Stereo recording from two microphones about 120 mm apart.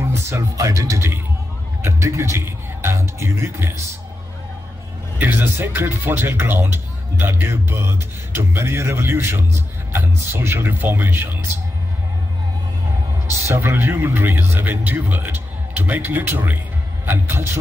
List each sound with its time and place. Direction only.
0.0 s speech: 25° right (ahead or behind)
5.2 s speech: 20° right (ahead or behind)
13.5 s a man's voice: 20° right (ahead or behind)